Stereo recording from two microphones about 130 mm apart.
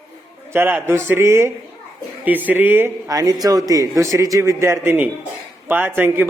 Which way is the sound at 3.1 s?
30° right (ahead or behind).